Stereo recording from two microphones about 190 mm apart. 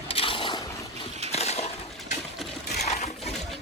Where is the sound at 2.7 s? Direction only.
35° left (ahead or behind).